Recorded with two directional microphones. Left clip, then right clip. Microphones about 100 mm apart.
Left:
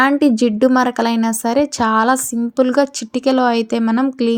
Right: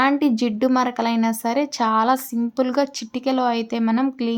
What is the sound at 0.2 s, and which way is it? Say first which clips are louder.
A woman's voice: left 7 dB; 40° left (ahead or behind).